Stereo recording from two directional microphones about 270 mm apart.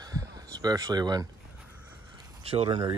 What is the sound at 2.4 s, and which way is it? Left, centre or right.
Speech, right.